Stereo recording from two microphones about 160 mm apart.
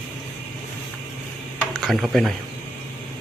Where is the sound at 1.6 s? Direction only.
5° left (ahead or behind).